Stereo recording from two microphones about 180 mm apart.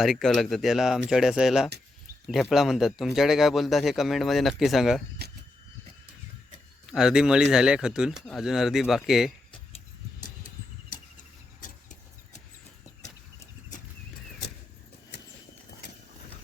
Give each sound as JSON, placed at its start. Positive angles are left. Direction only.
{"t": 0.0, "sound": "a man's voice", "side_deg": 0}
{"t": 6.8, "sound": "a man's voice", "side_deg": -5}
{"t": 10.2, "sound": "a sound", "side_deg": 45}